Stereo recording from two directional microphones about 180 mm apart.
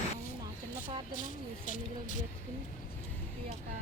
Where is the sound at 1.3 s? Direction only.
45° left (ahead or behind).